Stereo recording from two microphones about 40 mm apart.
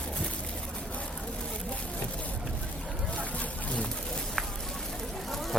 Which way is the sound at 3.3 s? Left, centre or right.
Left.